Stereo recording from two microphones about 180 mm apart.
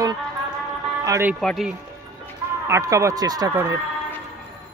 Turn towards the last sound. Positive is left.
turn(degrees=-20)  # may be behind; listen again after turning